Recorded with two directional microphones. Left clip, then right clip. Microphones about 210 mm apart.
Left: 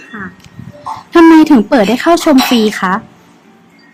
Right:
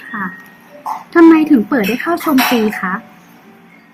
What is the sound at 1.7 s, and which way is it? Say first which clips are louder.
Speech: left 7 dB; 55° left (ahead or behind).